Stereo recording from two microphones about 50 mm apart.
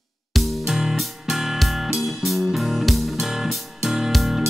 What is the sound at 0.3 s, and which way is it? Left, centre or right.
Music, centre.